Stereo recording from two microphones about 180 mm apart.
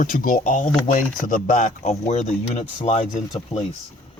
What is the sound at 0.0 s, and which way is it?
Speech, 50° left (ahead or behind).